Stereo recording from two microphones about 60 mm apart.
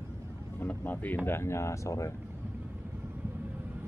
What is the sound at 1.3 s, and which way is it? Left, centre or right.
Speech, left.